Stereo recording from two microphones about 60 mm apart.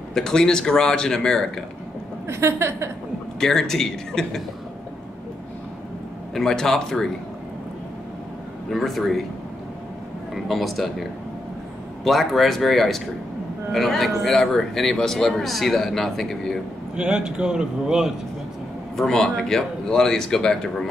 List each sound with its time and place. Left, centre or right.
0.1 s a man's voice: centre
2.2 s a woman's voice: right
3.3 s a man's voice: centre
6.3 s a man's voice: centre
8.6 s a man's voice: centre
10.3 s a man's voice: centre
16.9 s a man's voice: centre
18.9 s a man's voice: centre